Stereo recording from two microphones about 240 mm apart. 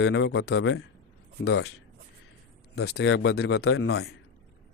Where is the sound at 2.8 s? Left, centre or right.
Left.